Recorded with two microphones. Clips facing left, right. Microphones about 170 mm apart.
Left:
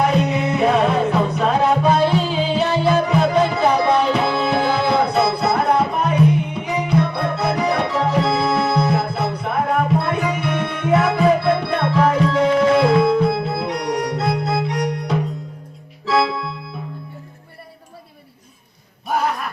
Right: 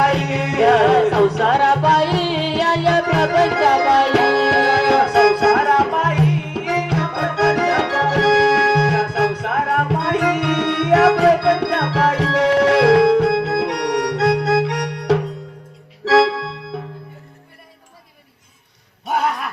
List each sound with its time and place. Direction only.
0.0 s music: 90° right